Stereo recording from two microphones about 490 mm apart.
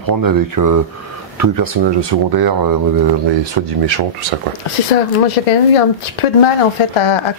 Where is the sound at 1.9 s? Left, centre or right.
Right.